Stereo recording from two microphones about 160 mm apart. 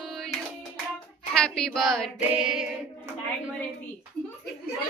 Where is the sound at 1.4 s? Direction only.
5° left (ahead or behind).